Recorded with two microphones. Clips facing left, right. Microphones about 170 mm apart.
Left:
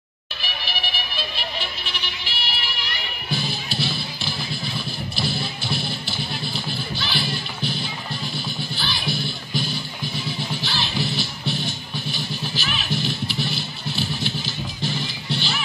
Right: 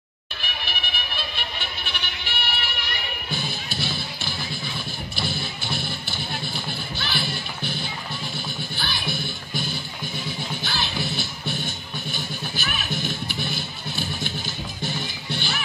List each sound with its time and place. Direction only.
0.7 s music: 55° right (ahead or behind)
3.7 s music: 55° right (ahead or behind)